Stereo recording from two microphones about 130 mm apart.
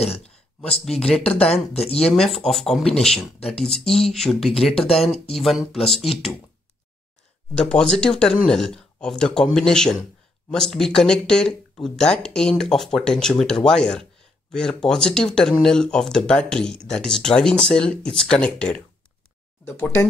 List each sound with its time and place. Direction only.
0.2 s a sound: 5° left (ahead or behind)
0.8 s speech: 5° left (ahead or behind)
1.7 s speech: 50° left (ahead or behind)
2.1 s speech: 5° left (ahead or behind)
5.0 s speech: 50° left (ahead or behind)
5.3 s speech: centre (ahead or behind)
7.5 s speech: 5° left (ahead or behind)
19.6 s speech: 20° left (ahead or behind)